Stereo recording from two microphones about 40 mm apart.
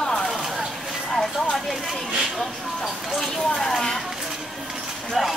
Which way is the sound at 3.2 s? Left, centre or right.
Centre.